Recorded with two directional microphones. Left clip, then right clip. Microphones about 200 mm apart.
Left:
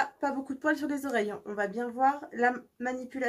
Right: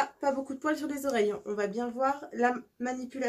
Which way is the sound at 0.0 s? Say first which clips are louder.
Right 1 dB; 20° left (ahead or behind).